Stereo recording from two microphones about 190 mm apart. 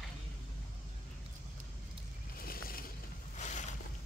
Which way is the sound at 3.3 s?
40° left (ahead or behind).